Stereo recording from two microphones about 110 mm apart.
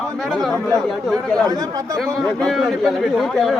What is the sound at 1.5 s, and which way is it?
Speech, 35° right (ahead or behind).